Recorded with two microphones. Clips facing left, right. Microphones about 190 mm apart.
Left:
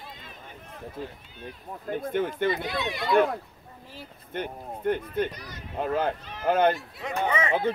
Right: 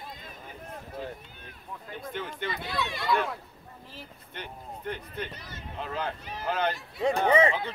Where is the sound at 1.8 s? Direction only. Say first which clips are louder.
Left 10 dB; 50° left (ahead or behind).